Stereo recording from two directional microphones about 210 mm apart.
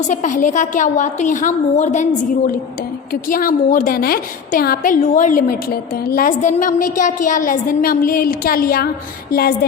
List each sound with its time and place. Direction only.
0.1 s a woman's voice: 35° left (ahead or behind)
3.1 s a woman's voice: 40° left (ahead or behind)
9.3 s music: 45° left (ahead or behind)